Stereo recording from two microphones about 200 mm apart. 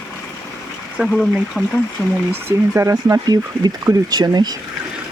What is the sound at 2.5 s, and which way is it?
Speech, 15° right (ahead or behind).